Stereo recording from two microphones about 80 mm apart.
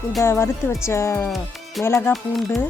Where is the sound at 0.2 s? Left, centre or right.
Left.